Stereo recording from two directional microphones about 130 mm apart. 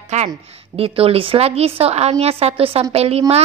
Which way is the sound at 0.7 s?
45° right (ahead or behind).